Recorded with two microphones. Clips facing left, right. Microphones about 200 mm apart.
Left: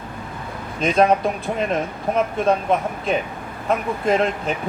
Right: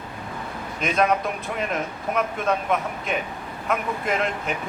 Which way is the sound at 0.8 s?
30° left (ahead or behind).